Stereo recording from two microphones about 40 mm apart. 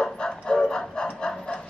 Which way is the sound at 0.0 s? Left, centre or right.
Centre.